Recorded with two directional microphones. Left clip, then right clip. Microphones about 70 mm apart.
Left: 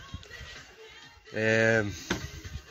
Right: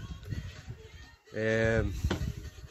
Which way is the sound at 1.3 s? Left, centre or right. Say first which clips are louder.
Left 4 dB; centre.